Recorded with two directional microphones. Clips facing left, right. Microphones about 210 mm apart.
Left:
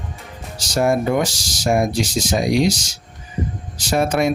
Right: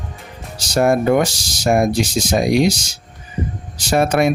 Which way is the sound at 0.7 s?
60° right (ahead or behind).